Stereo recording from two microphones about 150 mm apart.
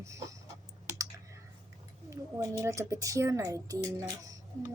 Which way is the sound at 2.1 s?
20° right (ahead or behind).